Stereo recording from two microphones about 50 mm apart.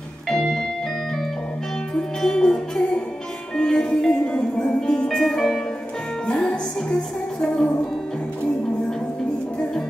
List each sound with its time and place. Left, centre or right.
0.3 s organ: centre
2.0 s music: centre
6.2 s music: left